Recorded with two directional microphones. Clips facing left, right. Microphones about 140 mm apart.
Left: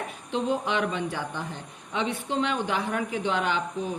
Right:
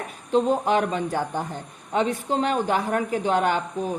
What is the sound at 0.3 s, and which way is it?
Speech, 40° right (ahead or behind).